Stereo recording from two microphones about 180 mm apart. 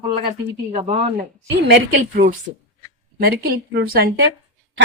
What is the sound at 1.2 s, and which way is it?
A woman's voice, 60° right (ahead or behind).